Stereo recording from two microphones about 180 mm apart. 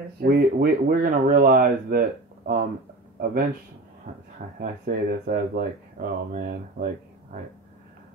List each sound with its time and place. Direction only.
0.2 s speech: 55° right (ahead or behind)
4.6 s speech: 50° right (ahead or behind)